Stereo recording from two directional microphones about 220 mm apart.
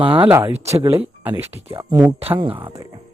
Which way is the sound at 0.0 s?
25° right (ahead or behind).